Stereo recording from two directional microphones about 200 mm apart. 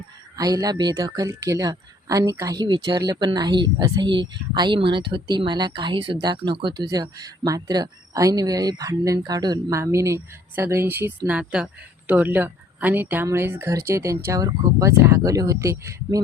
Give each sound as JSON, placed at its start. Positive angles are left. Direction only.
{"t": 0.3, "sound": "speech", "side_deg": -20}